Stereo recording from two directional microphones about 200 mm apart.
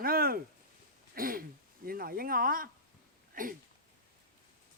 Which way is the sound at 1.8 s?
45° right (ahead or behind).